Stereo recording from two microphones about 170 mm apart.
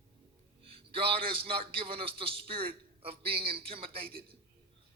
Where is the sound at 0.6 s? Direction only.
35° right (ahead or behind).